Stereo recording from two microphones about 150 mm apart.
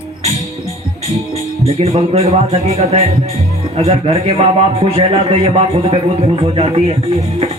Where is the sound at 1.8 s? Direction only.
45° right (ahead or behind).